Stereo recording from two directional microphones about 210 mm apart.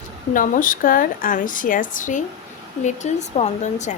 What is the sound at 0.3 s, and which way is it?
Speech, 40° left (ahead or behind).